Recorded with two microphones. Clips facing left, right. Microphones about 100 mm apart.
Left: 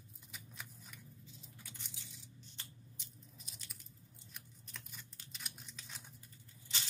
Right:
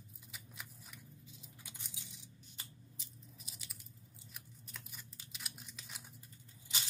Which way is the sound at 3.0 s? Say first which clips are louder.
Right 1 dB; 5° right (ahead or behind).